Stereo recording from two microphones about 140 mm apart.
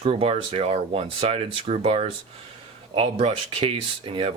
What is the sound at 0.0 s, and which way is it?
Speech, 45° right (ahead or behind).